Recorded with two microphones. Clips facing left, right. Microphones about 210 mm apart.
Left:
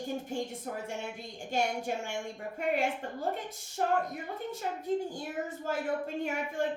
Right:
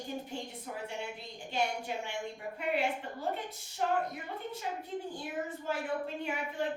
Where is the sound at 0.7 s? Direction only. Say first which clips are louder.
Left 2 dB; 50° left (ahead or behind).